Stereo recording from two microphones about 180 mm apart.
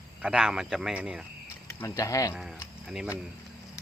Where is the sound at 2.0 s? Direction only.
20° left (ahead or behind).